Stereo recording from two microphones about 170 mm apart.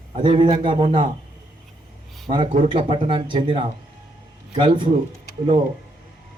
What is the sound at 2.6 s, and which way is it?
A man's voice, 30° right (ahead or behind).